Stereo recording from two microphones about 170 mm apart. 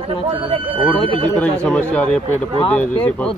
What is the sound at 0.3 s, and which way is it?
Speech, 30° right (ahead or behind).